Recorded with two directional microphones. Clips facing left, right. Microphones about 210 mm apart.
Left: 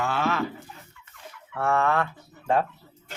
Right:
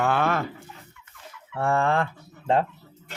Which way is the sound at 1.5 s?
30° right (ahead or behind).